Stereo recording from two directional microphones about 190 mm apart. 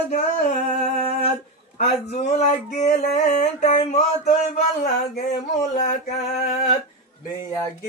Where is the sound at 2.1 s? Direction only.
35° left (ahead or behind).